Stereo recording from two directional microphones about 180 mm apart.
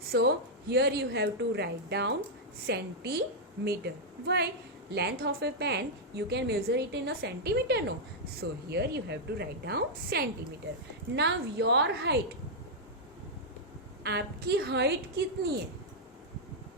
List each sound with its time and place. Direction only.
0.1 s a woman's voice: 65° right (ahead or behind)
14.0 s a woman's voice: 65° right (ahead or behind)